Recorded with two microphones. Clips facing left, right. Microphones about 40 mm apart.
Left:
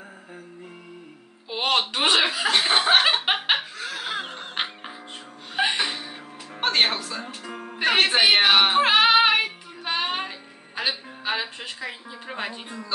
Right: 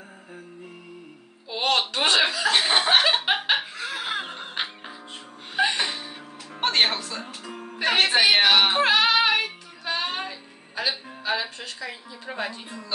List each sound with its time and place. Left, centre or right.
1.5 s a sound: centre
2.5 s chuckle: centre
3.0 s a sound: centre
3.7 s music: centre
5.6 s music: centre
7.2 s music: centre
8.8 s music: left
12.3 s speech: centre